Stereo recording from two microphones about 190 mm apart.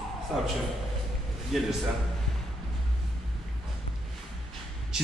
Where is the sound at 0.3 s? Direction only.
Centre (ahead or behind).